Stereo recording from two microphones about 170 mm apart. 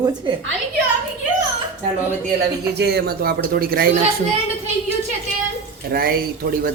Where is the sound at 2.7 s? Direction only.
75° right (ahead or behind).